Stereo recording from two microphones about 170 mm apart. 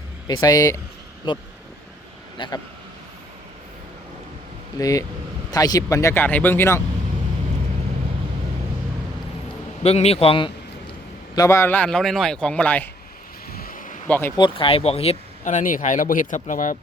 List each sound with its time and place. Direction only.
0.3 s speech: 25° left (ahead or behind)
4.8 s a man's voice: 20° left (ahead or behind)
9.8 s a man's voice: 40° left (ahead or behind)
11.3 s a man's voice: 15° left (ahead or behind)
13.5 s a sound: 60° left (ahead or behind)
14.1 s a man's voice: 15° left (ahead or behind)
14.3 s speech: 30° left (ahead or behind); by 16.7 s 50° left (ahead or behind)